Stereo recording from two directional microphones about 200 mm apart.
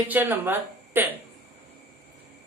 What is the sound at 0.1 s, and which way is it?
A woman's voice, 10° right (ahead or behind).